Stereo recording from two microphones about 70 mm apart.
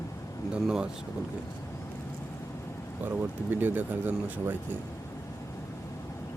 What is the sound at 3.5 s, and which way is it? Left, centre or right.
Speech, right.